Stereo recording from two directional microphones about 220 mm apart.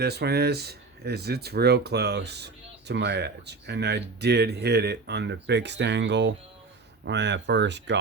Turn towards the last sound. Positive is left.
turn(degrees=-50)  # may be behind; listen again after turning